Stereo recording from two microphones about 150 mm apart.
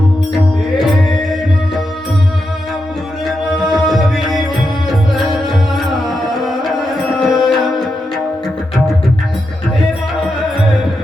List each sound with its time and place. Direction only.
3.6 s music: centre (ahead or behind)